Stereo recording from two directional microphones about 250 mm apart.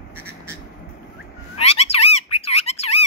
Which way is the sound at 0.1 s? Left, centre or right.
Centre.